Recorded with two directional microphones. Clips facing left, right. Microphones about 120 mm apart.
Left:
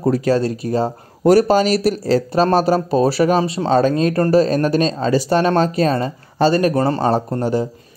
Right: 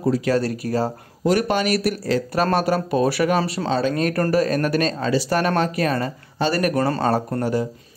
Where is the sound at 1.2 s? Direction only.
35° left (ahead or behind).